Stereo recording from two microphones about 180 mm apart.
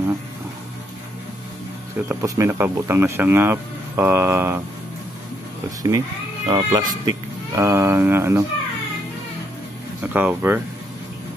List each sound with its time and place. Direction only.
2.0 s speech: 15° right (ahead or behind)
5.8 s speech: 20° right (ahead or behind)
10.1 s speech: 10° right (ahead or behind)